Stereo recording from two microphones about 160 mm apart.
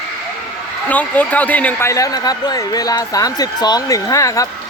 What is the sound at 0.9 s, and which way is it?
A man's voice, 10° left (ahead or behind).